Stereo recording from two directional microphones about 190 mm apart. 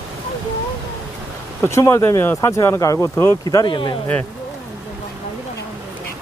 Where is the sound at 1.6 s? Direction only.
15° left (ahead or behind).